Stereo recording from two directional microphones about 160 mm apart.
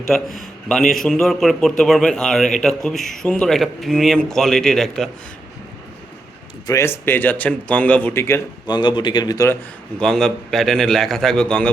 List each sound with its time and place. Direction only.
0.1 s a man's voice: centre (ahead or behind)
6.7 s speech: 15° left (ahead or behind)
8.6 s a man's voice: 30° left (ahead or behind)
10.0 s a man's voice: 5° left (ahead or behind)